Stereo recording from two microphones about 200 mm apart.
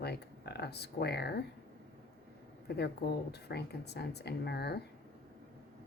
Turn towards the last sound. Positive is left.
turn(degrees=55)  # may be behind; listen again after turning